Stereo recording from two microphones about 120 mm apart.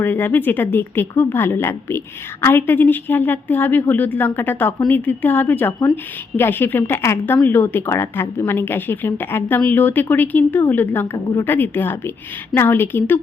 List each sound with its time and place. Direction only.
0.0 s a woman's voice: 15° left (ahead or behind)